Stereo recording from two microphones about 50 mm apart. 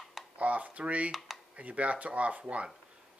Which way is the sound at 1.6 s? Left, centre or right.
Right.